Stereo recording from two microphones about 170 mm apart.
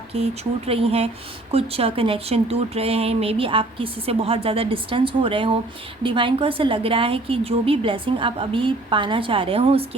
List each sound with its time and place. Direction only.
0.1 s speech: 35° right (ahead or behind)